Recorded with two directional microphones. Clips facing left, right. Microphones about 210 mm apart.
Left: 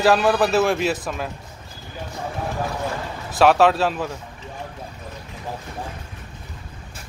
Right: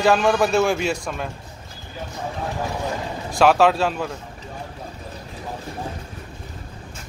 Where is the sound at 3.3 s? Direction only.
Centre (ahead or behind).